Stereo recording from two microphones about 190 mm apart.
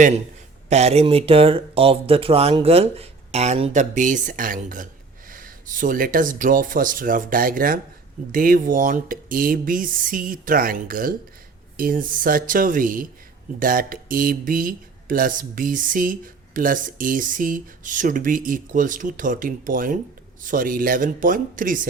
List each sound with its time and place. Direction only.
0.7 s speech: 35° right (ahead or behind)